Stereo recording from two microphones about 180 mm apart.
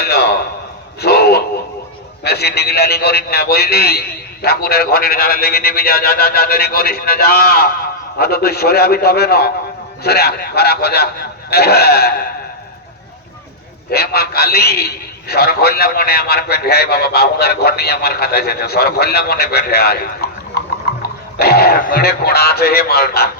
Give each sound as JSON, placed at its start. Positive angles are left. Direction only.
{"t": 0.0, "sound": "a sound", "side_deg": 60}
{"t": 2.2, "sound": "a man's voice", "side_deg": 65}
{"t": 13.9, "sound": "a man's voice", "side_deg": 60}